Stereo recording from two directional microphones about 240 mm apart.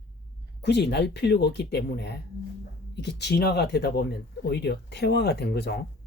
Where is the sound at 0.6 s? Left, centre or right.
Left.